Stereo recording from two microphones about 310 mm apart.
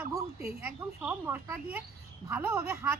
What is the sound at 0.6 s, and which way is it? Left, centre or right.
A woman's voice, centre.